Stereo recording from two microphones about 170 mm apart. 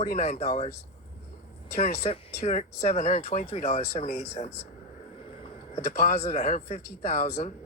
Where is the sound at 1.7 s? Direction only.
45° left (ahead or behind).